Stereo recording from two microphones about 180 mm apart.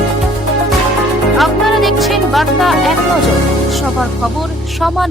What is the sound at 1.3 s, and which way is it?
Music, centre (ahead or behind).